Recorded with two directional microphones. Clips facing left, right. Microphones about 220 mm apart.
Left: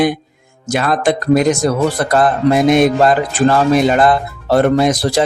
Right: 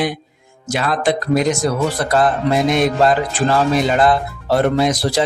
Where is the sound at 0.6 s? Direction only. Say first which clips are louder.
Left 3 dB; 50° left (ahead or behind).